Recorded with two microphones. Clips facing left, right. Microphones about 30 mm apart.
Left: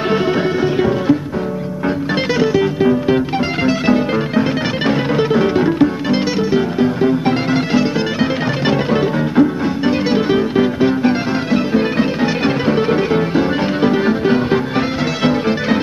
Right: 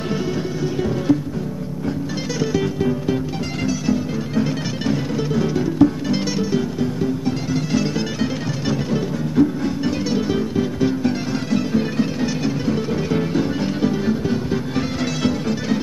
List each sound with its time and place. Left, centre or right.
0.7 s music: left
2.4 s music: left
3.6 s music: left
7.7 s music: left